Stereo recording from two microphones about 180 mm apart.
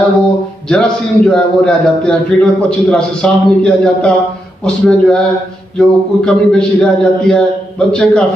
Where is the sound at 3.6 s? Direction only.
5° left (ahead or behind).